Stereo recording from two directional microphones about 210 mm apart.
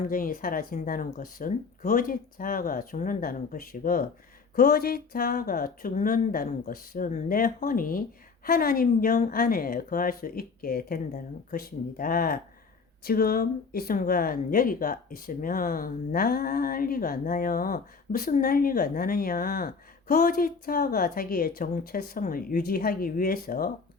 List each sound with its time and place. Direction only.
0.1 s speech: 40° left (ahead or behind)